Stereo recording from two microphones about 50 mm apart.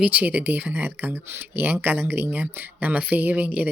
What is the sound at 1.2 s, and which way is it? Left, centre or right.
Speech, right.